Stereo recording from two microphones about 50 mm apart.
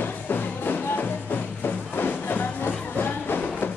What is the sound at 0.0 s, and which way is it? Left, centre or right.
Music, left.